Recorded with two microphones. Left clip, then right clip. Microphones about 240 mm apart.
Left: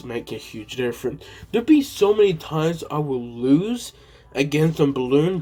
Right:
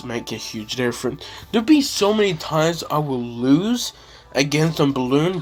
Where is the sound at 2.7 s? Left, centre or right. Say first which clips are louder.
Right 3 dB; right.